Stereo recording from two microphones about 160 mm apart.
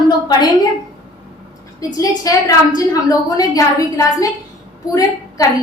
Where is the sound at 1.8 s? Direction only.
20° left (ahead or behind).